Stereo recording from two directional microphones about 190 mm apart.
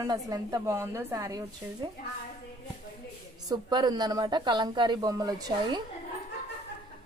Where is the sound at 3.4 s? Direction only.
20° right (ahead or behind).